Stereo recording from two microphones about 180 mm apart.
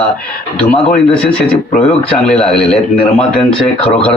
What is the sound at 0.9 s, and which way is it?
A man's voice, 5° left (ahead or behind).